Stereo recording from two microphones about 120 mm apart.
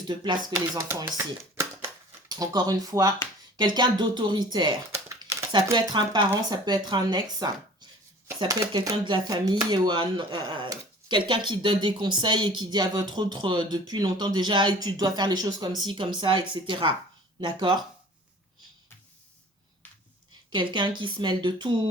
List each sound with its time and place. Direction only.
0.0 s speech: 35° right (ahead or behind)
0.5 s speech: 25° right (ahead or behind)
5.2 s a sound: 35° right (ahead or behind)
5.7 s speech: 40° right (ahead or behind)
9.0 s speech: 40° right (ahead or behind)
20.5 s speech: 40° right (ahead or behind)